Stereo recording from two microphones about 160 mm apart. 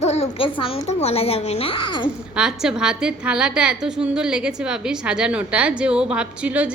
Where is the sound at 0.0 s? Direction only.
45° left (ahead or behind).